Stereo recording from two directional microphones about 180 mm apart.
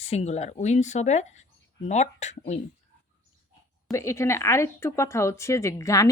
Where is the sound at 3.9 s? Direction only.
15° left (ahead or behind).